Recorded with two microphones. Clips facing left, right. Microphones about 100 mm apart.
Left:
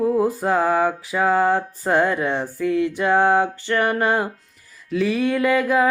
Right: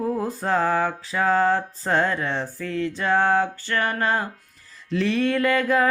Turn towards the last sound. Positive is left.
turn(degrees=10)  # may be behind; listen again after turning